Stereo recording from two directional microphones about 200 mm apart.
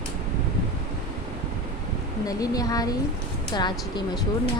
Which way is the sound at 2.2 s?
20° left (ahead or behind).